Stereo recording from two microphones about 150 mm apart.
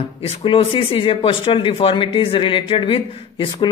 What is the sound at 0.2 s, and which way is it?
Speech, 40° left (ahead or behind).